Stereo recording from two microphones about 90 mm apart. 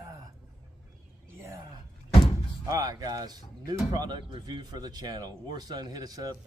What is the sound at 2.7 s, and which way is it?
Speech, 45° right (ahead or behind).